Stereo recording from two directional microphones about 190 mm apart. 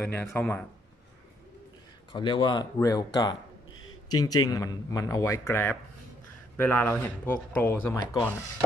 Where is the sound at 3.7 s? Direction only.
90° left.